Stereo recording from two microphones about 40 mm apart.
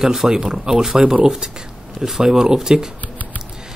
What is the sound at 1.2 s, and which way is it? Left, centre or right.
Speech, centre.